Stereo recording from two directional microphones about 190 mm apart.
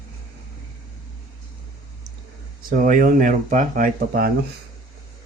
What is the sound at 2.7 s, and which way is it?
Speech, 45° right (ahead or behind).